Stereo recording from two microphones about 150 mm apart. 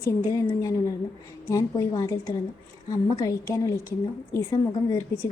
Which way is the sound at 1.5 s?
25° left (ahead or behind).